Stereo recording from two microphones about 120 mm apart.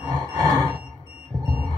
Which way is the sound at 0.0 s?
35° right (ahead or behind).